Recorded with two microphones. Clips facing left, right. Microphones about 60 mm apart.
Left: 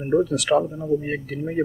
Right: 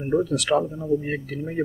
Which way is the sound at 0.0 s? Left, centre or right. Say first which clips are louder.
Left 2 dB; centre.